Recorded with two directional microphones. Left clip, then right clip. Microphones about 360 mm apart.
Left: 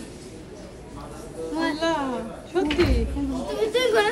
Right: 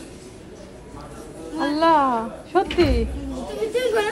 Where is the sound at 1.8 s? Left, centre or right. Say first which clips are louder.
Right 11 dB; centre.